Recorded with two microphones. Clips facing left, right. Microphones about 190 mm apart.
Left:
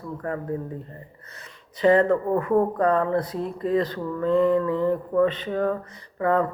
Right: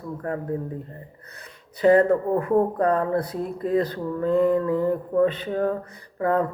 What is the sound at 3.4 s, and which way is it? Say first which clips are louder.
Speech: even; 5° right (ahead or behind).